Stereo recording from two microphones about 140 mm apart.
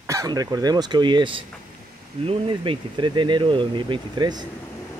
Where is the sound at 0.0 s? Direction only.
25° right (ahead or behind).